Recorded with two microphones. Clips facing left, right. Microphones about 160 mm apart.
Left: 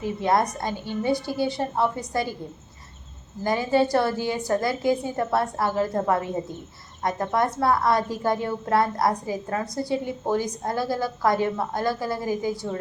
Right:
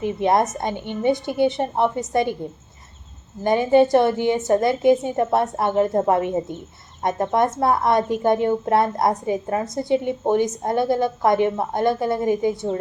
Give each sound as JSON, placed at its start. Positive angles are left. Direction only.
{"t": 0.0, "sound": "a woman's voice", "side_deg": -20}
{"t": 3.4, "sound": "a woman's voice", "side_deg": -25}